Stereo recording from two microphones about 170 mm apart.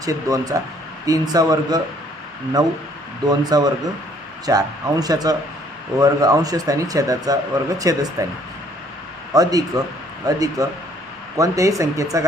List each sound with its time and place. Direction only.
0.0 s speech: 20° right (ahead or behind)
9.3 s speech: 20° right (ahead or behind)